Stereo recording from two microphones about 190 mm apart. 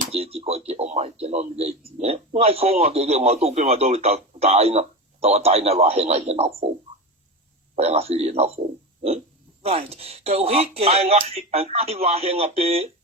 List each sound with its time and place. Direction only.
0.1 s a man's voice: 30° right (ahead or behind)
7.8 s a man's voice: 35° right (ahead or behind)
9.6 s a man's voice: 30° right (ahead or behind)